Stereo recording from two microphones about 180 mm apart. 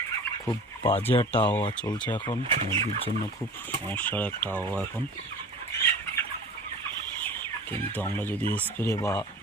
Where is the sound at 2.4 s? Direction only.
30° right (ahead or behind).